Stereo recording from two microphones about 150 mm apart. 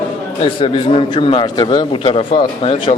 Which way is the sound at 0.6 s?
35° left (ahead or behind).